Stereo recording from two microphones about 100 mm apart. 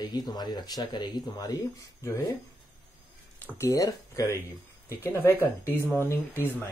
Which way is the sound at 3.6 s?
35° left (ahead or behind).